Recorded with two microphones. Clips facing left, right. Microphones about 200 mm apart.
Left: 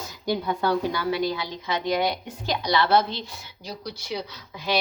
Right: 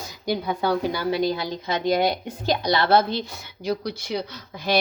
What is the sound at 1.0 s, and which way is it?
Speech, 40° right (ahead or behind).